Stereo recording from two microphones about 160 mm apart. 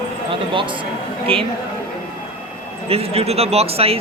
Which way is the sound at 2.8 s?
40° right (ahead or behind).